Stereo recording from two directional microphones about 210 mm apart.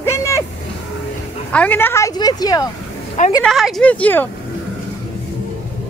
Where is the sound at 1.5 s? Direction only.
10° left (ahead or behind).